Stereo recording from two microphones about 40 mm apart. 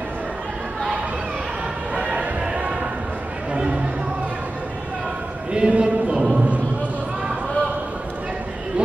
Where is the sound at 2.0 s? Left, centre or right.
Right.